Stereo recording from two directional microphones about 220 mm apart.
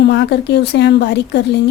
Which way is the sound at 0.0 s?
50° left (ahead or behind).